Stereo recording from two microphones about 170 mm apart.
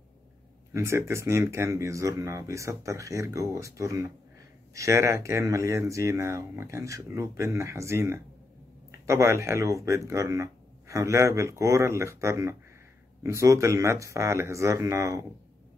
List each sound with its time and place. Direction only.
0.7 s speech: 15° right (ahead or behind)